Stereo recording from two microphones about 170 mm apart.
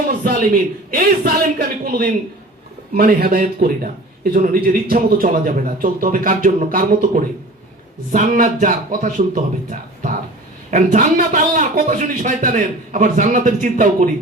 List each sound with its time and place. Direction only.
0.3 s a man's voice: 55° right (ahead or behind)